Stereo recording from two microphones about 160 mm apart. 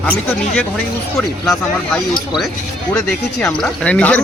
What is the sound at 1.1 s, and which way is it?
Speech, 5° left (ahead or behind).